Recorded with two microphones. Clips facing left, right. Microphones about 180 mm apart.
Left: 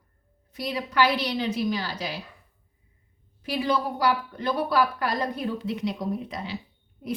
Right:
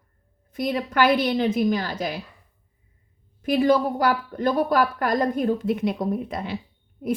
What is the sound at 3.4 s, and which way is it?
A woman's voice, 50° right (ahead or behind).